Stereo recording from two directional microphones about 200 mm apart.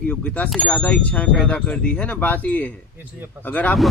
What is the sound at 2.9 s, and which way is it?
Speech, 10° right (ahead or behind).